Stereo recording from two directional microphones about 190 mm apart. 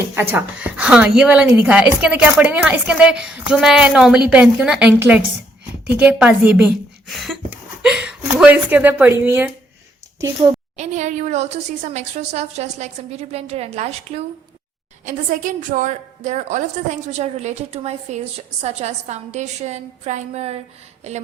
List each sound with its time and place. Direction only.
0.1 s a woman's voice: 10° right (ahead or behind)
10.8 s a woman's voice: 40° right (ahead or behind)
15.0 s a woman's voice: 45° right (ahead or behind)